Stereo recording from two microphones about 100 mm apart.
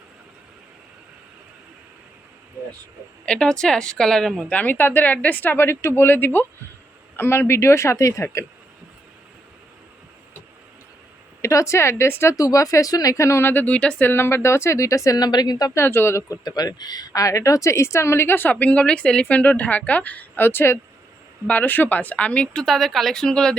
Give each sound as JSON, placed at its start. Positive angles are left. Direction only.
{"t": 3.2, "sound": "speech", "side_deg": 10}
{"t": 4.5, "sound": "a woman's voice", "side_deg": 20}
{"t": 11.4, "sound": "a woman's voice", "side_deg": 30}
{"t": 15.8, "sound": "speech", "side_deg": 25}